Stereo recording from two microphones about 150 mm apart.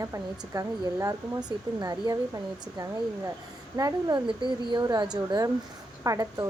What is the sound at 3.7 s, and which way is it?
Speech, 25° right (ahead or behind).